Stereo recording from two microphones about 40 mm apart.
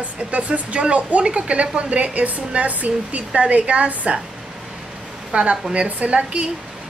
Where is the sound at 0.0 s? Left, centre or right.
Right.